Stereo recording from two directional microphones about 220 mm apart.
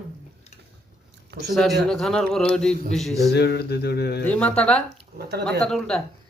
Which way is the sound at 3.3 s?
50° left (ahead or behind).